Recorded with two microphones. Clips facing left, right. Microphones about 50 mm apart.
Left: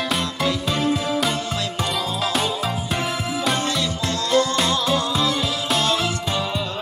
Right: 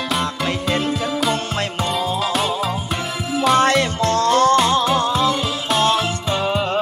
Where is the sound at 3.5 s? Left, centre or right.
Right.